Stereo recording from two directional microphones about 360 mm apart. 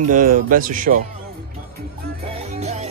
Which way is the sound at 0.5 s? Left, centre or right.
Right.